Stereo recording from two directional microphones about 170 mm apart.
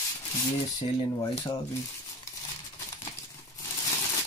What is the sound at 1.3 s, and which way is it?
Speech, 25° left (ahead or behind).